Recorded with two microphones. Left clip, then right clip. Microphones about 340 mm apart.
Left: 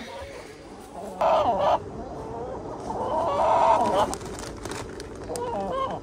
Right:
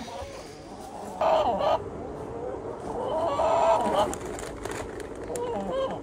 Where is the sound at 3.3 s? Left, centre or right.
Centre.